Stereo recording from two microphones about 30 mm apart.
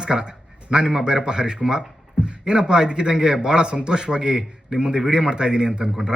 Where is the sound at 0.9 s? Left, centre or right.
Right.